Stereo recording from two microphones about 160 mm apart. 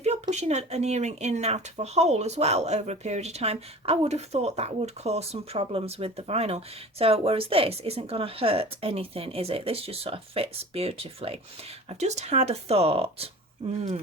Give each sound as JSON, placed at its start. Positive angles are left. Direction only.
{"t": 0.0, "sound": "speech", "side_deg": -45}